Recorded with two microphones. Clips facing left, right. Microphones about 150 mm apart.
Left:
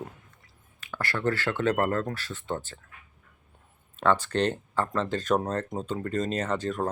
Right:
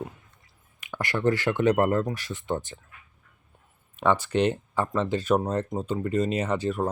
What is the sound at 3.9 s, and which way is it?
Speech, 15° right (ahead or behind).